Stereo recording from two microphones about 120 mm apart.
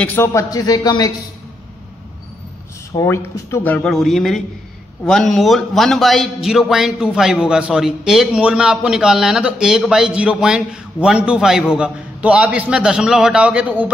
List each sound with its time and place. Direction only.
0.0 s a man's voice: 20° left (ahead or behind)
3.0 s speech: 20° left (ahead or behind)
3.8 s a man's voice: centre (ahead or behind)